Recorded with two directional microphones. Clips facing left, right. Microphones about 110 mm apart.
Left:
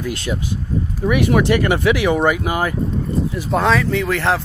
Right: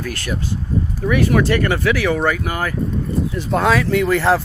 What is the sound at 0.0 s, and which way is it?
Speech, 20° left (ahead or behind).